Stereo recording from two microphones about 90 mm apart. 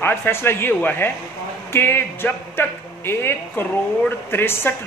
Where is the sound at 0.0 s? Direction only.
20° left (ahead or behind).